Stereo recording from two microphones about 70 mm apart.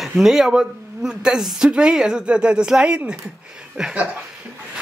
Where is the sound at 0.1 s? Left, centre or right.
Centre.